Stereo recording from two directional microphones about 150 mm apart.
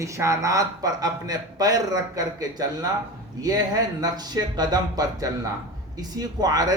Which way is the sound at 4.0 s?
25° right (ahead or behind).